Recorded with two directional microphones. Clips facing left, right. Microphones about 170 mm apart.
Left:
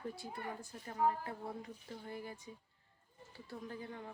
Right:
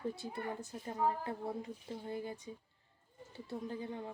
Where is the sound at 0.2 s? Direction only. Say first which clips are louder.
Right 4 dB; 25° right (ahead or behind).